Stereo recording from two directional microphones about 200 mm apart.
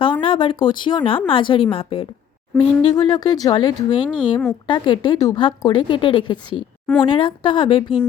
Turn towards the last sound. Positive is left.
turn(degrees=25)  # may be behind; listen again after turning